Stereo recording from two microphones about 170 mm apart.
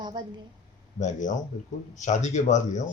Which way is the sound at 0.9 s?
45° left (ahead or behind).